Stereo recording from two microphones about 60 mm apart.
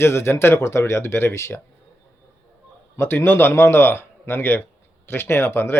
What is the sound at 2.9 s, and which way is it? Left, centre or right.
Speech, left.